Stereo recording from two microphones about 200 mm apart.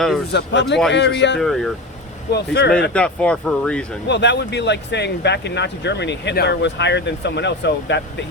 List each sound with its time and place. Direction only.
0.3 s speech: 60° left (ahead or behind)
1.4 s speech: centre (ahead or behind)
2.3 s speech: 55° left (ahead or behind)
2.9 s speech: 5° left (ahead or behind)
4.1 s speech: 60° left (ahead or behind)